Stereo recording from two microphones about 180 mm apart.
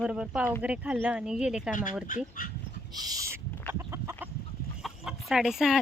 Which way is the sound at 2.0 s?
50° left (ahead or behind).